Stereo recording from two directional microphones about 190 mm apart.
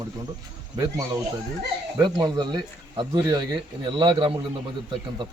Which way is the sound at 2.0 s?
20° right (ahead or behind).